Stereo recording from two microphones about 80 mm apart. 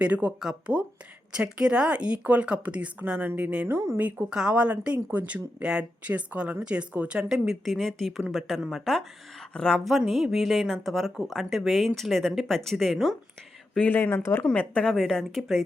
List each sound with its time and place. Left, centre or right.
0.0 s speech: centre
3.7 s speech: right
4.3 s a woman's voice: centre
10.3 s speech: centre
13.7 s speech: left
14.4 s a woman's voice: centre
14.9 s speech: centre